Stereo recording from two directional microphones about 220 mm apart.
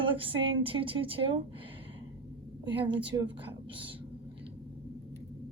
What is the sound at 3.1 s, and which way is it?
Speech, 15° right (ahead or behind).